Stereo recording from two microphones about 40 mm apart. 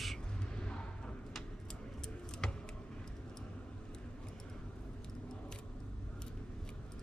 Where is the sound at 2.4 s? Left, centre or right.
Centre.